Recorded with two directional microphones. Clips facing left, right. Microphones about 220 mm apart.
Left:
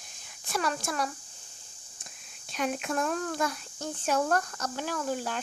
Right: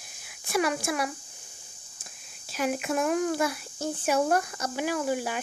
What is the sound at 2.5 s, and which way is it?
Speech, 5° right (ahead or behind).